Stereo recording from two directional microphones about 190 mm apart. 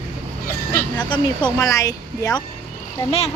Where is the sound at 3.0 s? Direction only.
30° left (ahead or behind).